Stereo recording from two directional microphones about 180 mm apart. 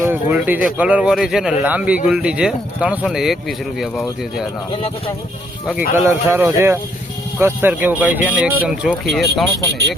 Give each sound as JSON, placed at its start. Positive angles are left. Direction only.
{"t": 0.0, "sound": "speech", "side_deg": -10}
{"t": 4.7, "sound": "speech", "side_deg": 30}
{"t": 6.1, "sound": "speech", "side_deg": -15}